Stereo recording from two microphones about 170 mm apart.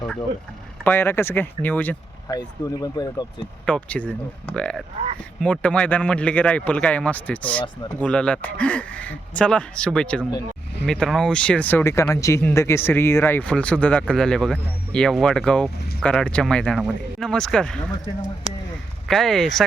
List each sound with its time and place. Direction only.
0.9 s speech: 15° left (ahead or behind)
2.3 s speech: 25° left (ahead or behind)
3.7 s speech: 10° left (ahead or behind)
19.0 s speech: 5° left (ahead or behind)